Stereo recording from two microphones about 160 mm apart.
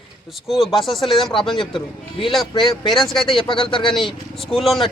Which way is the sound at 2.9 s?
Centre (ahead or behind).